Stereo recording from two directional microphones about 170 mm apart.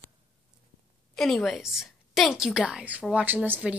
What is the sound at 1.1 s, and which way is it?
A woman's voice, centre (ahead or behind).